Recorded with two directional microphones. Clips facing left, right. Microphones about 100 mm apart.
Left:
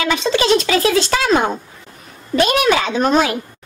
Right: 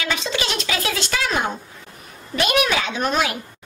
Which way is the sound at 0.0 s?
35° left (ahead or behind).